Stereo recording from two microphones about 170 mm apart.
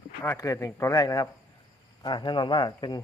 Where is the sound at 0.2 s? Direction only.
20° left (ahead or behind).